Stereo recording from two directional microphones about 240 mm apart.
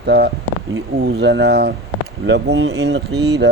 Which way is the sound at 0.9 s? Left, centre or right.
Right.